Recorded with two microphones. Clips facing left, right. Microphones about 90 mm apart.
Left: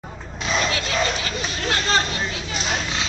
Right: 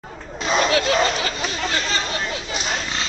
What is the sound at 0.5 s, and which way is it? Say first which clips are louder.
Speech: right 4 dB; 35° right (ahead or behind).